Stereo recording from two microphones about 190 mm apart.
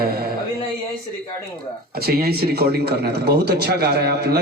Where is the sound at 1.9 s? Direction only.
55° right (ahead or behind).